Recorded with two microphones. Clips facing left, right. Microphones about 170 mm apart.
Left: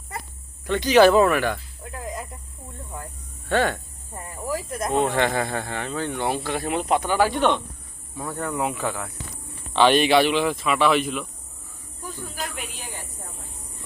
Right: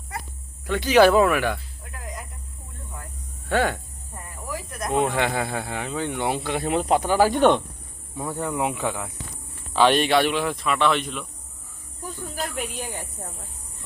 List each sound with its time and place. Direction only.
0.7 s speech: 10° right (ahead or behind)
1.8 s snake: 25° left (ahead or behind)
3.5 s speech: 10° right (ahead or behind)
4.1 s snake: 25° left (ahead or behind)
5.1 s speech: 10° right (ahead or behind); by 7.5 s 45° right (ahead or behind)
8.2 s speech: 15° right (ahead or behind)
9.7 s speech: centre (ahead or behind)